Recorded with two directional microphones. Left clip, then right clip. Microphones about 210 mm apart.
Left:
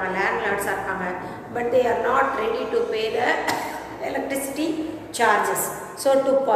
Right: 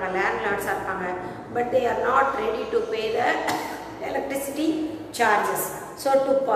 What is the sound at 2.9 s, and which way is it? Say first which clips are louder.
Speech: left 1 dB; 15° left (ahead or behind).